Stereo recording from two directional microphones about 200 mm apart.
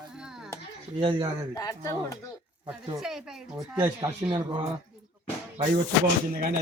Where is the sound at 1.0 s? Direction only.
25° right (ahead or behind).